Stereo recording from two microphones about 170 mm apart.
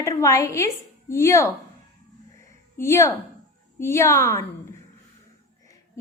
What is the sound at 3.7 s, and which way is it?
Speech, 15° left (ahead or behind).